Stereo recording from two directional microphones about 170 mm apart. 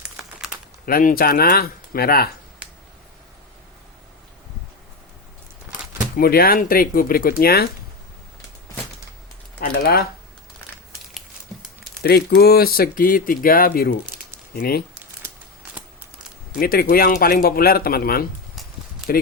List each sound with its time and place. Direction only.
0.2 s a sound: centre (ahead or behind)
0.9 s speech: 60° left (ahead or behind)
6.1 s speech: 60° left (ahead or behind)
9.6 s speech: 70° left (ahead or behind)
12.0 s speech: 65° left (ahead or behind)
16.6 s speech: 60° left (ahead or behind)